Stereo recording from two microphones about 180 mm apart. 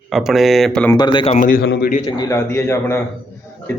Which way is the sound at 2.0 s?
20° left (ahead or behind).